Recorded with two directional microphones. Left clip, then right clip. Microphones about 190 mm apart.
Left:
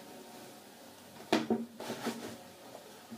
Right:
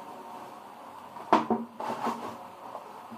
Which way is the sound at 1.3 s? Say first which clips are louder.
Right 7 dB; 25° left (ahead or behind).